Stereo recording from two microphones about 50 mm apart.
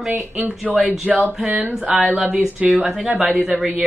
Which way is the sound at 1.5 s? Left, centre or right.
Right.